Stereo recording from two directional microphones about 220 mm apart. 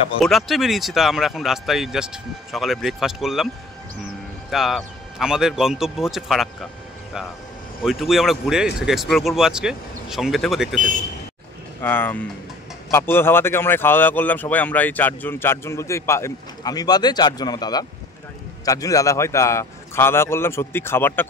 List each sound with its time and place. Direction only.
0.2 s speech: centre (ahead or behind)
4.5 s speech: centre (ahead or behind)
7.8 s speech: centre (ahead or behind)